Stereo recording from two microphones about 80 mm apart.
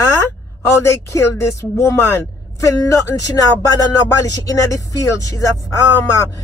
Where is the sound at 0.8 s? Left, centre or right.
Left.